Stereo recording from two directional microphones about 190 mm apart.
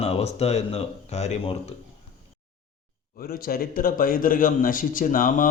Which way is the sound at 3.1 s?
50° left (ahead or behind).